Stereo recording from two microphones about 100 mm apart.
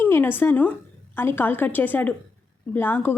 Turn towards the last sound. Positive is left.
turn(degrees=20)  # may be behind; listen again after turning